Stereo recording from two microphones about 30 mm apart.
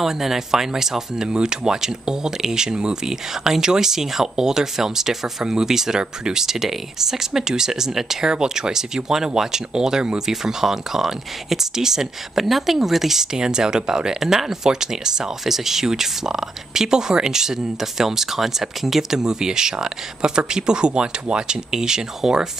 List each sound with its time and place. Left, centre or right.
0.0 s speech: centre
19.1 s speech: right